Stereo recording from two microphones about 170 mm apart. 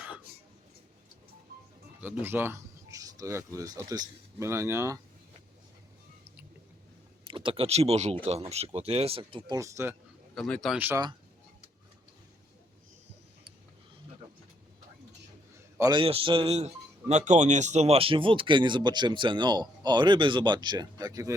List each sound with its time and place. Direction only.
2.0 s speech: 10° right (ahead or behind)
7.3 s speech: 30° right (ahead or behind)
9.6 s speech: 15° right (ahead or behind)
10.3 s speech: centre (ahead or behind)
10.8 s speech: 10° right (ahead or behind)
15.8 s speech: 25° right (ahead or behind)